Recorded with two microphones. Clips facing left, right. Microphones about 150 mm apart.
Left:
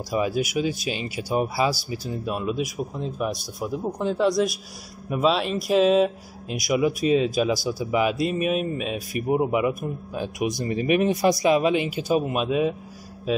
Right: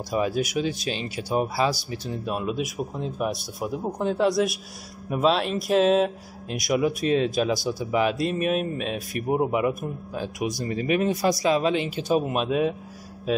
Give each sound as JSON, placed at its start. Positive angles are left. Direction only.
{"t": 0.1, "sound": "speech", "side_deg": 5}
{"t": 10.1, "sound": "speech", "side_deg": 15}